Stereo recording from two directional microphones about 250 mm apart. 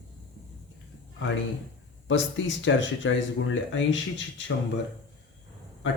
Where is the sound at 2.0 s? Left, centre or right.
Left.